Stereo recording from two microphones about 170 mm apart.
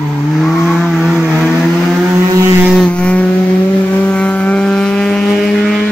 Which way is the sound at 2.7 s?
5° left (ahead or behind).